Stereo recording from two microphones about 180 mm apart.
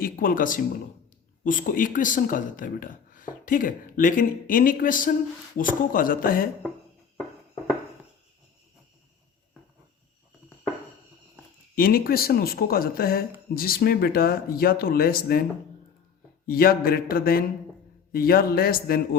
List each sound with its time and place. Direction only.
0.0 s speech: 50° left (ahead or behind)
11.7 s speech: 55° left (ahead or behind)
16.5 s speech: 55° left (ahead or behind)